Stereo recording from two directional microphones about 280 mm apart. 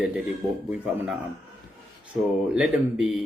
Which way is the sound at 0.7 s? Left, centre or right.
Centre.